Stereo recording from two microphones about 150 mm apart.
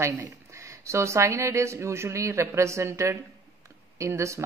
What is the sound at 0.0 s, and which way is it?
Speech, 20° right (ahead or behind).